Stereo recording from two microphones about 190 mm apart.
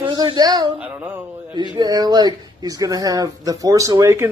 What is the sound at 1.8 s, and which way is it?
Speech, 20° right (ahead or behind).